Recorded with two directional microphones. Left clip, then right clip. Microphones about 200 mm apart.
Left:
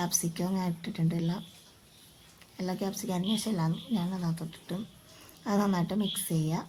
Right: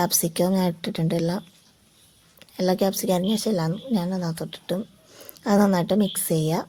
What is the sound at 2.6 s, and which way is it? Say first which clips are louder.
A woman's voice: right 13 dB; 40° right (ahead or behind).